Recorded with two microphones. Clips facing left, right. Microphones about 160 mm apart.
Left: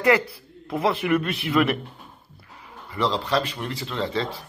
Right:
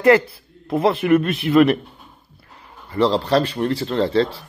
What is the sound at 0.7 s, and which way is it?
A man's voice, 25° right (ahead or behind).